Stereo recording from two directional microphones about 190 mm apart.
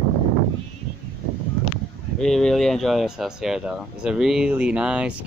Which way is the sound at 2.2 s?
Centre (ahead or behind).